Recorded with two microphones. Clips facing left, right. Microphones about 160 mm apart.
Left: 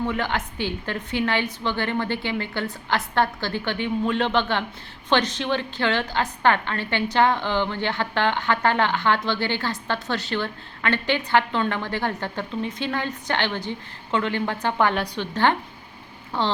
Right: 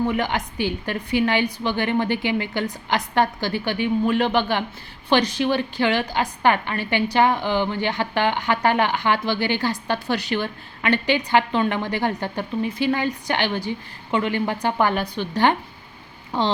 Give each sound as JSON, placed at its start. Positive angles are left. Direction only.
{"t": 0.0, "sound": "a woman's voice", "side_deg": -15}